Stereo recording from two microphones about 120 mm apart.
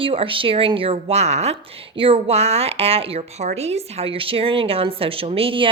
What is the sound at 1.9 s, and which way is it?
A woman's voice, 50° right (ahead or behind).